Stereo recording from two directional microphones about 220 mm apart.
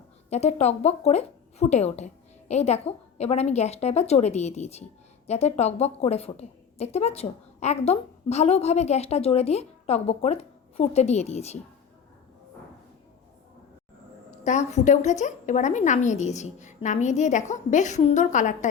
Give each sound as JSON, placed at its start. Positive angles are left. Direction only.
{"t": 0.3, "sound": "a woman's voice", "side_deg": 30}
{"t": 14.3, "sound": "a woman's voice", "side_deg": 35}